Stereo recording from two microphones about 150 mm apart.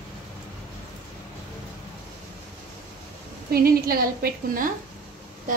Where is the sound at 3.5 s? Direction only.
85° right.